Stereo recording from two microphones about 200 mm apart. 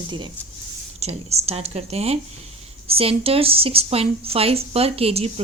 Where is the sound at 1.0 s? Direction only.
30° right (ahead or behind).